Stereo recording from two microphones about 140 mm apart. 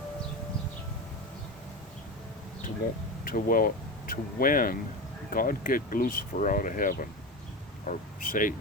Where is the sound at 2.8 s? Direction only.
90° left.